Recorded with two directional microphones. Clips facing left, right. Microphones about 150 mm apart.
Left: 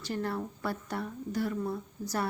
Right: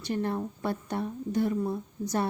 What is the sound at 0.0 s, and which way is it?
Speech, 20° right (ahead or behind).